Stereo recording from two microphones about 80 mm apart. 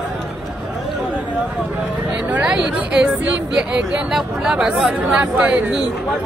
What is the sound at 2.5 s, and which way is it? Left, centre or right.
Speech, centre.